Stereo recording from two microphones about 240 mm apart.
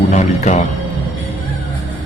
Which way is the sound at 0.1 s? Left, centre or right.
Left.